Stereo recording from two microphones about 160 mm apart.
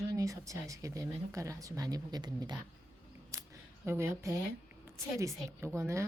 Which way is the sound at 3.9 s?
15° right (ahead or behind).